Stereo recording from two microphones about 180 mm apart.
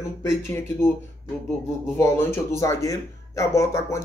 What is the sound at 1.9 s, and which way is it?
Speech, 15° left (ahead or behind).